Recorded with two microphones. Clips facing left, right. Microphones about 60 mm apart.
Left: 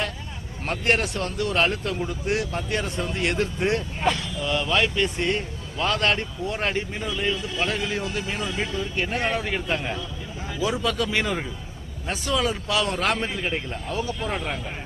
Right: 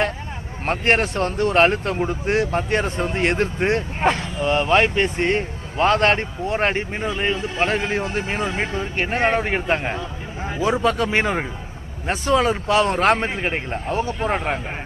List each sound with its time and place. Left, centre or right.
0.6 s speech: right